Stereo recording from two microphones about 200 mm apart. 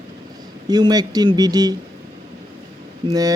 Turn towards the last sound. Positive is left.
turn(degrees=-20)  # may be behind; listen again after turning